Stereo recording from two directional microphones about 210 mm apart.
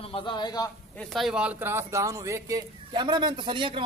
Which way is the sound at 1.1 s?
Centre (ahead or behind).